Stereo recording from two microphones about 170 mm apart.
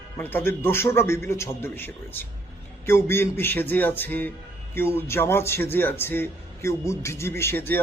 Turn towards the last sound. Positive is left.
turn(degrees=10)  # may be behind; listen again after turning